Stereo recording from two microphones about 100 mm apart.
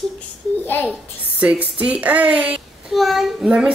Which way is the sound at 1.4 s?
10° right (ahead or behind).